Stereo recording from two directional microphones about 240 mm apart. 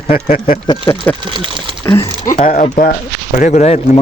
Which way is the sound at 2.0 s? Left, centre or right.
Left.